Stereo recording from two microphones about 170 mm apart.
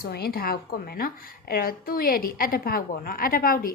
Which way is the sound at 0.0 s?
65° left (ahead or behind).